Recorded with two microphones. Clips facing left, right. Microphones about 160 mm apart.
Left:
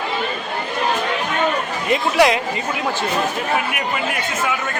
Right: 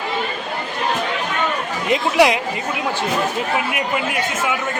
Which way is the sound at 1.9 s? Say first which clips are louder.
Even; 15° right (ahead or behind).